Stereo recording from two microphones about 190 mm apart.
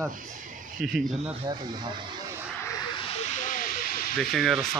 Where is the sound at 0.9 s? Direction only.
Centre (ahead or behind).